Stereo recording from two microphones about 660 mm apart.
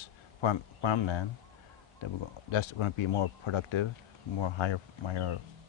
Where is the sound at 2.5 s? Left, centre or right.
Left.